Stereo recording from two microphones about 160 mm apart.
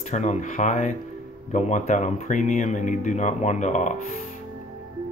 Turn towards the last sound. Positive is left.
turn(degrees=50)  # may be behind; listen again after turning